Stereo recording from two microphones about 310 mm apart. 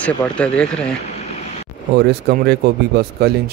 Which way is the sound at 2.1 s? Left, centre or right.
Right.